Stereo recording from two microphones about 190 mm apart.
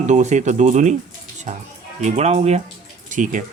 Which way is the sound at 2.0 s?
35° right (ahead or behind).